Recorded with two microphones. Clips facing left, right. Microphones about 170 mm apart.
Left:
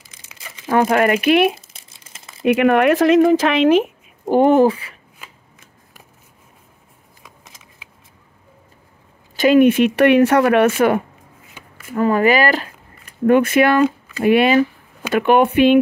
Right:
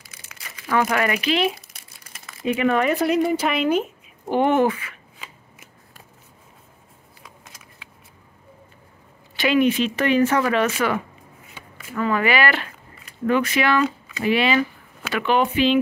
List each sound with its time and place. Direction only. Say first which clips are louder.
0.7 s speech: left 6 dB; 35° left (ahead or behind)
1.0 s speech: left 7 dB; 50° left (ahead or behind)
1.7 s crumpling: left 1 dB; 25° left (ahead or behind)
2.4 s speech: left 6 dB; 65° left (ahead or behind); by 3.9 s 90° left
4.3 s speech: left 6 dB; 40° left (ahead or behind)
9.4 s speech: left 7 dB; 50° left (ahead or behind)
13.3 s speech: left 7 dB; 50° left (ahead or behind)